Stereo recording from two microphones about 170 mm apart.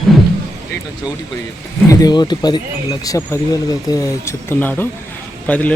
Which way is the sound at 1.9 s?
20° left (ahead or behind).